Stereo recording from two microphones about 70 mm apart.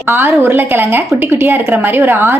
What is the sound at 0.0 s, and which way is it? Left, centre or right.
A woman's voice, right.